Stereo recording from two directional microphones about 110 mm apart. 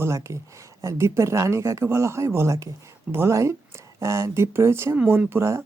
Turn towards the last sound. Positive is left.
turn(degrees=-25)  # may be behind; listen again after turning